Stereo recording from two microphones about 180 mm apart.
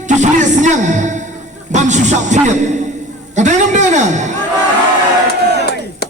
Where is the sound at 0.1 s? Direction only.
45° right (ahead or behind).